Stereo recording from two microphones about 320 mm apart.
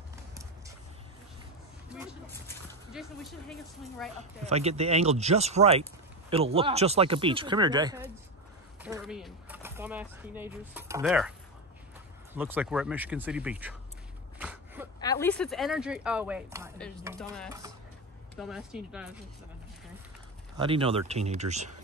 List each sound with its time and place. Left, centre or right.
2.4 s a sound: centre
4.2 s speech: centre
12.4 s speech: centre
14.4 s a sound: centre
15.0 s speech: centre
20.5 s speech: centre